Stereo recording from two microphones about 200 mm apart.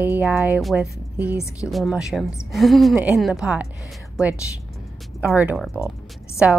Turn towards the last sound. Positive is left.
turn(degrees=-5)  # may be behind; listen again after turning